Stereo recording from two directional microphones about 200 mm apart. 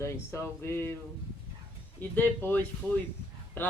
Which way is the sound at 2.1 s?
10° left (ahead or behind).